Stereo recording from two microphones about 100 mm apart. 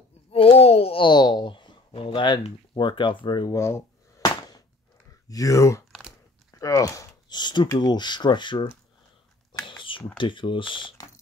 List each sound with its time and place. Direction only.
0.3 s a sound: 80° left
1.0 s a sound: 45° left (ahead or behind)
2.4 s speech: 55° left (ahead or behind)
3.5 s speech: 25° left (ahead or behind)
4.2 s a sound: 40° left (ahead or behind)
5.3 s speech: 30° left (ahead or behind)
5.9 s biting: centre (ahead or behind)
6.6 s speech: 30° left (ahead or behind); by 8.6 s 50° left (ahead or behind)
9.7 s mechanisms: 55° left (ahead or behind)
10.1 s speech: 55° left (ahead or behind)